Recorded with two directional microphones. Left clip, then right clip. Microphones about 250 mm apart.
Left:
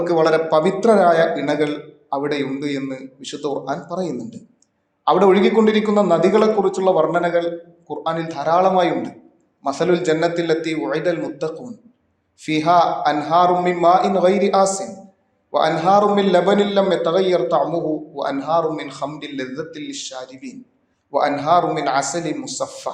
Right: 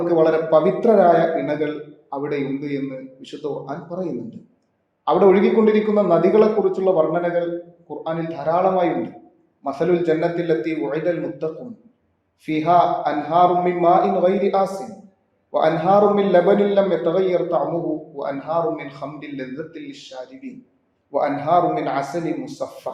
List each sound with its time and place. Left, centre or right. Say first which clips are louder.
0.1 s a man's voice: even; centre